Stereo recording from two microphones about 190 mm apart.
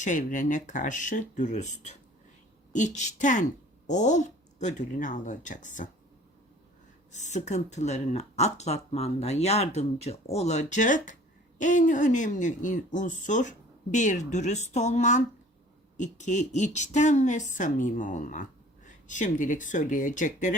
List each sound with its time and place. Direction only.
0.0 s speech: 45° left (ahead or behind)
7.1 s speech: 40° left (ahead or behind)